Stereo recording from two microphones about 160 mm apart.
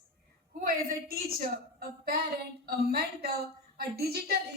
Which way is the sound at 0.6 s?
65° right (ahead or behind).